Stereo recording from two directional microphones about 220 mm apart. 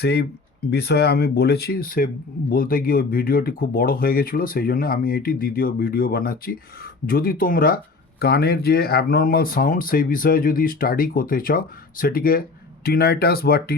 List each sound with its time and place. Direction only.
0.0 s speech: 50° left (ahead or behind)